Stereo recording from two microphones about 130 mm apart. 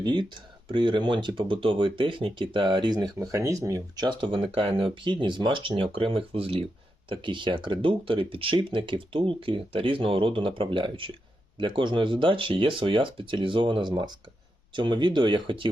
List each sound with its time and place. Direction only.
0.0 s speech: 35° right (ahead or behind)